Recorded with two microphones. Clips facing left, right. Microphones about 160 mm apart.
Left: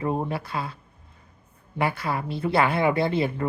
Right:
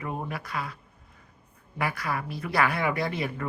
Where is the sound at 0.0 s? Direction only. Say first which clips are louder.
Left 7 dB; 30° left (ahead or behind).